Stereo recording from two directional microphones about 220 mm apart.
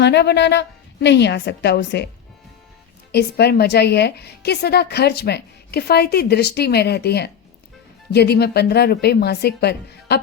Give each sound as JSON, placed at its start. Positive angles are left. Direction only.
{"t": 0.0, "sound": "a woman's voice", "side_deg": 50}
{"t": 3.1, "sound": "a woman's voice", "side_deg": 45}